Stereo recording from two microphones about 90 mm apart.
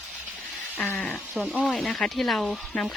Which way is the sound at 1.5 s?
15° right (ahead or behind).